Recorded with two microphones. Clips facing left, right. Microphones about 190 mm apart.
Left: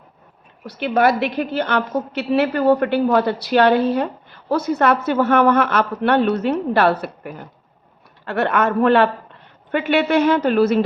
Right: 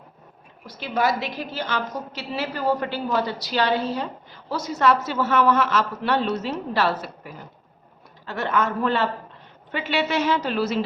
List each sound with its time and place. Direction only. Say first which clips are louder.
0.6 s a woman's voice: left 7 dB; 65° left (ahead or behind)